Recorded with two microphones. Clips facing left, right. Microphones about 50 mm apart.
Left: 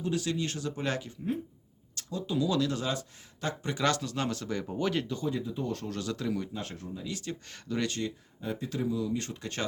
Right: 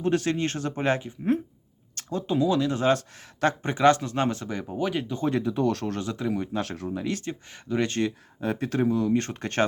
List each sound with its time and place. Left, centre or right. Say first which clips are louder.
0.0 s speech: right 7 dB; right
4.4 s speech: right 2 dB; centre
5.2 s speech: right 8 dB; right
6.0 s speech: right 4 dB; right
6.5 s speech: right 9 dB; right
7.3 s speech: right 5 dB; right
8.0 s speech: right 7 dB; right